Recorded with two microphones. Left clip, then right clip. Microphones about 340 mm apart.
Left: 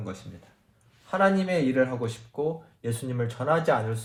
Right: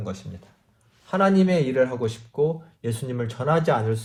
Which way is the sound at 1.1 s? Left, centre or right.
Right.